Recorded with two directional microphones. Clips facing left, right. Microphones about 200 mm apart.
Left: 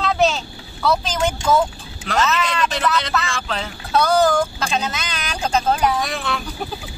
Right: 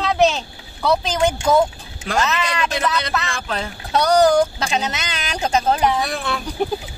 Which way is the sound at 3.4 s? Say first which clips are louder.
Right 1 dB; 10° right (ahead or behind).